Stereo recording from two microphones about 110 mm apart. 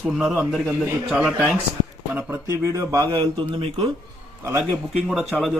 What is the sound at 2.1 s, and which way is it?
Speech, 25° right (ahead or behind).